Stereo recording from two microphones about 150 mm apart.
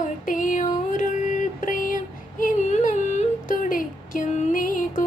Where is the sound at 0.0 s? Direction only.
60° left (ahead or behind).